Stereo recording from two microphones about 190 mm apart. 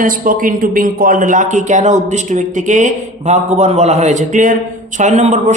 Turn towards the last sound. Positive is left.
turn(degrees=-40)  # may be behind; listen again after turning